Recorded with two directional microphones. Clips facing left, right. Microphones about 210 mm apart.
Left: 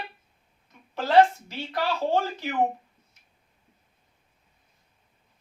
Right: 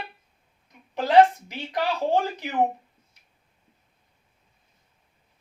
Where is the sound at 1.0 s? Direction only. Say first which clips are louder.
Right 2 dB; 15° right (ahead or behind).